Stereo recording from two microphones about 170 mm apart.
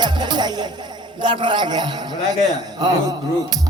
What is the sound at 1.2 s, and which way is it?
Speech, 30° right (ahead or behind).